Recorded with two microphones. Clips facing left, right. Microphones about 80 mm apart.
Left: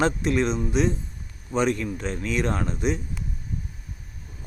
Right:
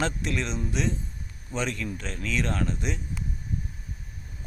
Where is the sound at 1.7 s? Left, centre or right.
Left.